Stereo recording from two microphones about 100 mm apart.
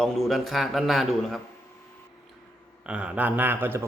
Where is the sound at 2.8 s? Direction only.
10° right (ahead or behind).